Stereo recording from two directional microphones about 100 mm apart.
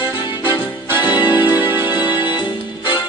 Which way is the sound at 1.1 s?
45° left (ahead or behind).